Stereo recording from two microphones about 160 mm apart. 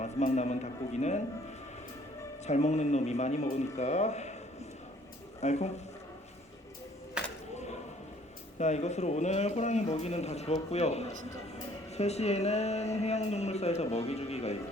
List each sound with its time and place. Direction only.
0.0 s speech: 45° left (ahead or behind)
2.5 s speech: 45° left (ahead or behind)
5.4 s speech: 45° left (ahead or behind)
7.2 s a sound: 5° right (ahead or behind)
8.5 s speech: 45° left (ahead or behind)